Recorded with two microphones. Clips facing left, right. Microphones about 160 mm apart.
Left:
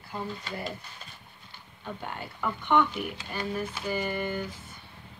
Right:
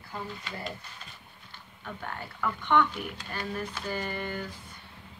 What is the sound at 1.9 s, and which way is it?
A woman's voice, 20° left (ahead or behind).